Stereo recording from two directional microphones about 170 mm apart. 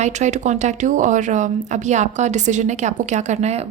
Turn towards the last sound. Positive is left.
turn(degrees=-40)  # may be behind; listen again after turning